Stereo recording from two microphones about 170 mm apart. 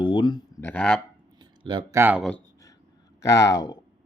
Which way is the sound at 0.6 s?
10° left (ahead or behind).